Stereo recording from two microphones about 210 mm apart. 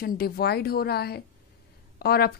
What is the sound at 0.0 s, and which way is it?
A woman's voice, 50° left (ahead or behind).